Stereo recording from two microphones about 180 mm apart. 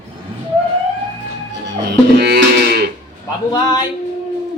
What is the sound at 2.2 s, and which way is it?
Moo, 65° right (ahead or behind).